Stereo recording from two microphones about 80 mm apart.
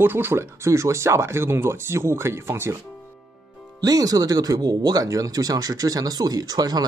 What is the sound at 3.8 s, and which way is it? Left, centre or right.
Speech, right.